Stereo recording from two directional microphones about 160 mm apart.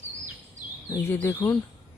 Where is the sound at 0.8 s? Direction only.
15° left (ahead or behind).